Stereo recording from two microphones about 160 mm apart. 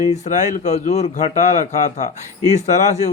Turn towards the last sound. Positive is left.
turn(degrees=45)  # may be behind; listen again after turning